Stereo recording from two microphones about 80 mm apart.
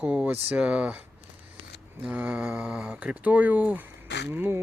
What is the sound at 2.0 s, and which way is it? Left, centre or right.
Speech, centre.